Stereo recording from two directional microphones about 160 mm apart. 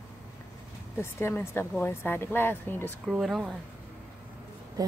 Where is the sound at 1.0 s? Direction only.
15° left (ahead or behind).